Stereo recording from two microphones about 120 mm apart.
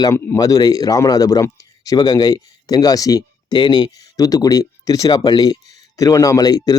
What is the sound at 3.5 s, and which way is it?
Speech, 45° left (ahead or behind).